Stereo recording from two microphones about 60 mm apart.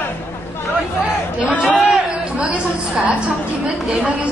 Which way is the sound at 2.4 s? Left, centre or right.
Right.